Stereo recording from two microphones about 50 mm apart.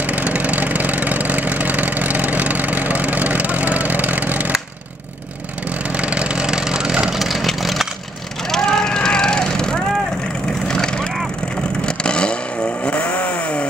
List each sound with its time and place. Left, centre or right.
0.0 s vehicle: right
5.7 s vehicle: right
7.2 s vehicle: centre
8.4 s vehicle: centre
12.8 s chainsaw: left